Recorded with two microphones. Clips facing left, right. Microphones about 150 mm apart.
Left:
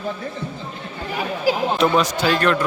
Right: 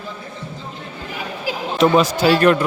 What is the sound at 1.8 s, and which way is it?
Speech, 5° right (ahead or behind).